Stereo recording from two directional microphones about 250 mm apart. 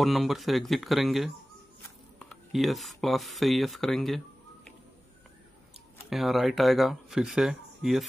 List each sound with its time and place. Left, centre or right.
0.0 s speech: centre
6.0 s speech: centre